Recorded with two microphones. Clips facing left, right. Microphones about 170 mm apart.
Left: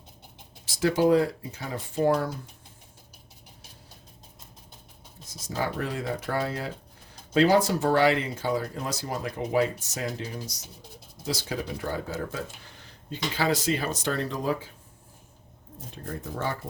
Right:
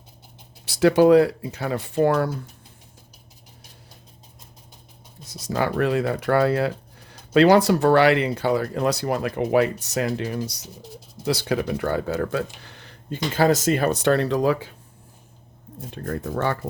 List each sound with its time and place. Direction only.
0.6 s speech: 70° right (ahead or behind)
5.2 s speech: 70° right (ahead or behind)
16.0 s speech: 70° right (ahead or behind)